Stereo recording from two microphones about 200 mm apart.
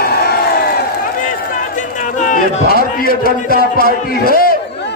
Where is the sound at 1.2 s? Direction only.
40° left (ahead or behind).